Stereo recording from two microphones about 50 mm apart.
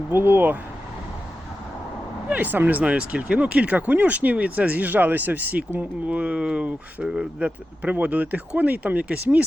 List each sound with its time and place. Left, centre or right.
0.1 s speech: right
2.3 s speech: right